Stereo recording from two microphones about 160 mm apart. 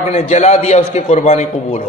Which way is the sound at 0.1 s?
40° left (ahead or behind).